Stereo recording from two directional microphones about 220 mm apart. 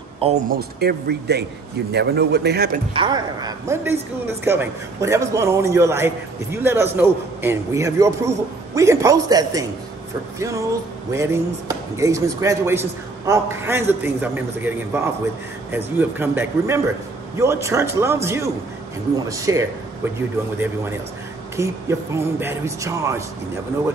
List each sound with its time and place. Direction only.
0.2 s speech: 30° right (ahead or behind)
0.6 s a man's voice: 45° right (ahead or behind)
2.9 s speech: 20° right (ahead or behind)